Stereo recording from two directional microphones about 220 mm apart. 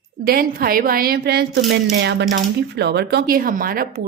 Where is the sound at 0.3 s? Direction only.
45° right (ahead or behind).